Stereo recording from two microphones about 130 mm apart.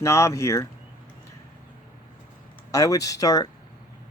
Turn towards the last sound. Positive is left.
turn(degrees=30)  # may be behind; listen again after turning